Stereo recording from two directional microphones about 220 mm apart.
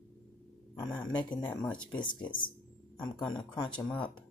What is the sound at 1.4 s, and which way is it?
Speech, 5° left (ahead or behind).